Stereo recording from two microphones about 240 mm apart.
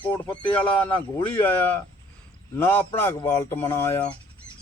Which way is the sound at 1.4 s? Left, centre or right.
Centre.